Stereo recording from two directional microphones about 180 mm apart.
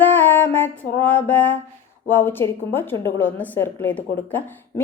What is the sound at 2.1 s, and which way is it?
A woman's voice, 10° left (ahead or behind).